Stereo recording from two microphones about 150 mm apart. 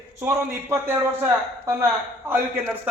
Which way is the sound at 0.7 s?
15° right (ahead or behind).